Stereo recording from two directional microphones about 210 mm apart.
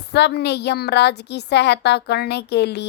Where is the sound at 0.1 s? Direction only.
50° left (ahead or behind).